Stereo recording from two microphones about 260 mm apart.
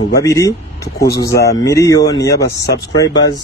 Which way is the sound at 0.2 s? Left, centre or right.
Centre.